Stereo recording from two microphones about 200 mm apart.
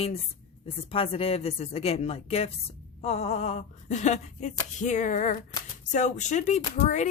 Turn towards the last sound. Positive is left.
turn(degrees=35)  # may be behind; listen again after turning